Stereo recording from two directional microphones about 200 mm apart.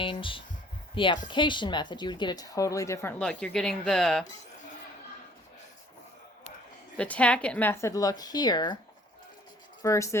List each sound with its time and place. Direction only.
0.0 s a woman's voice: 25° left (ahead or behind); by 4.3 s centre (ahead or behind)
6.9 s a woman's voice: 5° left (ahead or behind); by 8.8 s 20° left (ahead or behind)
9.8 s a woman's voice: 15° left (ahead or behind)